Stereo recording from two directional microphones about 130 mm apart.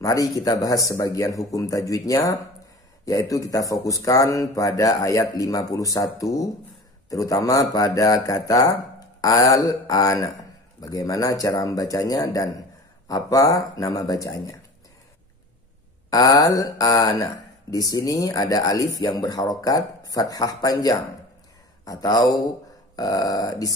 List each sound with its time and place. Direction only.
0.0 s a sound: 25° left (ahead or behind)
0.4 s speech: 25° left (ahead or behind)
16.1 s speech: 25° left (ahead or behind)